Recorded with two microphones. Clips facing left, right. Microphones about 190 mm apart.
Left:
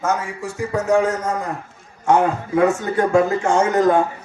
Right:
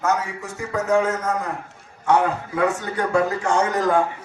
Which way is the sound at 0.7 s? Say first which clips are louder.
Left 2 dB; 30° left (ahead or behind).